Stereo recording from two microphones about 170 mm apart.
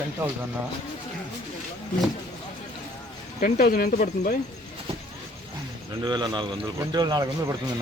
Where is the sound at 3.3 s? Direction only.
60° left (ahead or behind).